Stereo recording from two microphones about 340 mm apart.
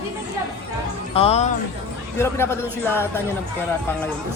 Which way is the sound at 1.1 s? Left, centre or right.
Centre.